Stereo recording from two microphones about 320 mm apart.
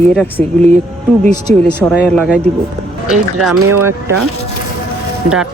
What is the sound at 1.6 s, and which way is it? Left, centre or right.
Speech, centre.